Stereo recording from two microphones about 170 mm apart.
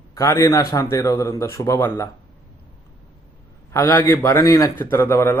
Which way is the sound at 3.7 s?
15° left (ahead or behind).